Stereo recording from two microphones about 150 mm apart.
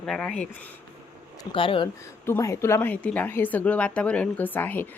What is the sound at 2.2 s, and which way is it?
A woman's voice, 20° left (ahead or behind).